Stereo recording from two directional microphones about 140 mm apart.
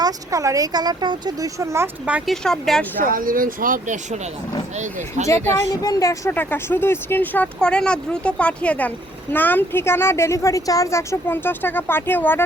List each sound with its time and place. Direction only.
0.0 s speech: 25° right (ahead or behind)
2.0 s speech: 10° right (ahead or behind)
2.3 s speech: 5° left (ahead or behind)
3.0 s speech: 80° right; by 5.3 s 60° right (ahead or behind)
5.8 s speech: 25° left (ahead or behind)
6.3 s a woman's voice: 15° left (ahead or behind)